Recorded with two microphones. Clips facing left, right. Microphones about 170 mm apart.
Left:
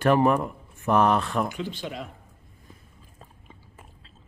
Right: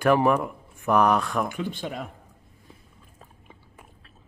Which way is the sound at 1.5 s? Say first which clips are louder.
Right 2 dB; 50° right (ahead or behind).